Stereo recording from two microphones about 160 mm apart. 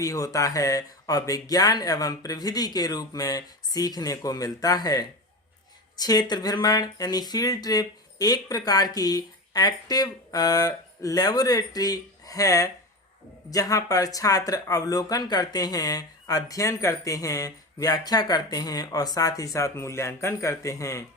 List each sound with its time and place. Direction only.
0.0 s speech: 20° left (ahead or behind)